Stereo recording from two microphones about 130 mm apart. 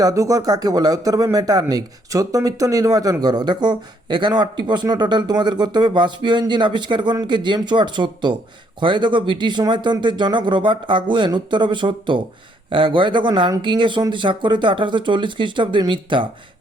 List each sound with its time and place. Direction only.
0.0 s speech: 25° right (ahead or behind)